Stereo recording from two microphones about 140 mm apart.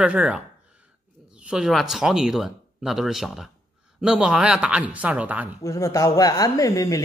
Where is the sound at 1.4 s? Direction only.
5° right (ahead or behind).